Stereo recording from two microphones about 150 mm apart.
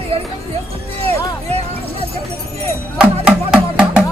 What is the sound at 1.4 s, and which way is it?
Music, 45° right (ahead or behind).